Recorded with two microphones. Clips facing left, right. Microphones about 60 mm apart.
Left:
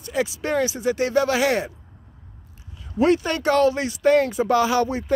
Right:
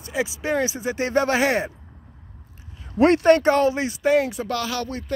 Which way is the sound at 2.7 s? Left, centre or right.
Right.